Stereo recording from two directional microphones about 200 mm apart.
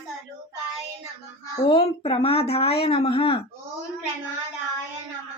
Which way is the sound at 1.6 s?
30° left (ahead or behind).